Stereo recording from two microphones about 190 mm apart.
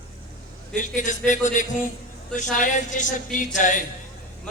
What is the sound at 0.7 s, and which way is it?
Speech, 40° left (ahead or behind).